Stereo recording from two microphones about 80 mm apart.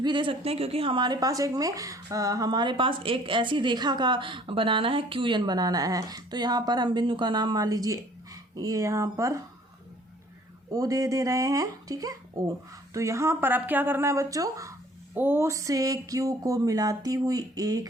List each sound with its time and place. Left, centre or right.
0.0 s a woman's voice: right
1.2 s a woman's voice: right
5.5 s speech: right
10.7 s speech: right
15.1 s a woman's voice: right
15.4 s speech: right